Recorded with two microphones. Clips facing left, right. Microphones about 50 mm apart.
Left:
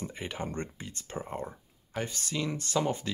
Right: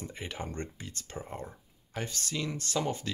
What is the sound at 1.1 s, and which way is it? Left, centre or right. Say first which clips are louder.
Speech: left 4 dB; left.